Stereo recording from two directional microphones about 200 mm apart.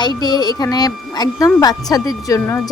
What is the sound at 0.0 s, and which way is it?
Speech, 20° left (ahead or behind).